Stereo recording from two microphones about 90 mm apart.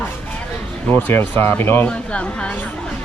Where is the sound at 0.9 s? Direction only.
20° left (ahead or behind).